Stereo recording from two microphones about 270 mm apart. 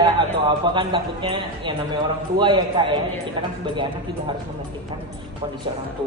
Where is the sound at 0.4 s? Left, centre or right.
Centre.